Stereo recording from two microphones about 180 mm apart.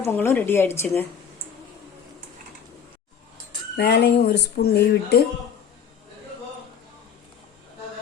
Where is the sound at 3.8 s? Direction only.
65° left (ahead or behind).